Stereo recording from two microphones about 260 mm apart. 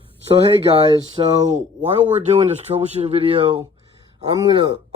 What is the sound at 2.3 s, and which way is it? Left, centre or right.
Speech, right.